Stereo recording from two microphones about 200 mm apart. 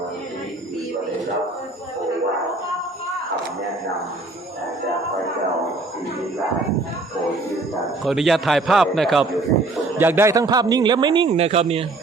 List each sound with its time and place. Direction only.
8.0 s a man's voice: centre (ahead or behind)
10.0 s a man's voice: 10° right (ahead or behind); by 11.6 s 30° right (ahead or behind)